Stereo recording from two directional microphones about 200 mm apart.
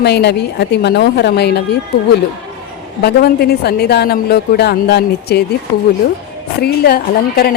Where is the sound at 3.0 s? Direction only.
50° left (ahead or behind).